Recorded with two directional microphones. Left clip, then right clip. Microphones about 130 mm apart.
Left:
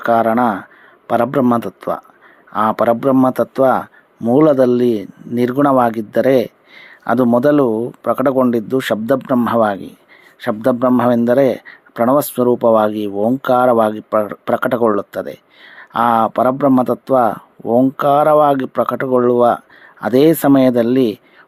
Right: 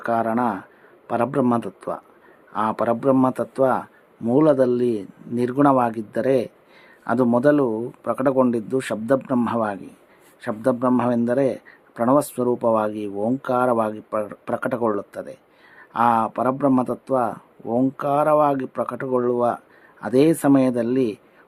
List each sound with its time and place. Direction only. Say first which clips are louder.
0.0 s speech: left 8 dB; 30° left (ahead or behind)